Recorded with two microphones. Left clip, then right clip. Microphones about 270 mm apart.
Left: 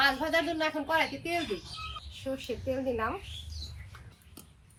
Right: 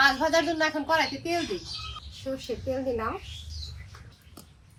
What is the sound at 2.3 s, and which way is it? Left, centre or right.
Speech, centre.